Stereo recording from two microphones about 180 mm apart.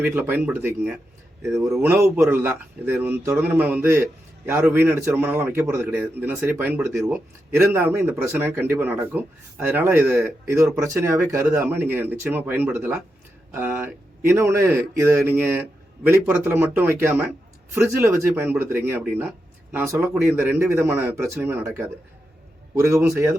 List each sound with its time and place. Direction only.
0.0 s a man's voice: 10° right (ahead or behind)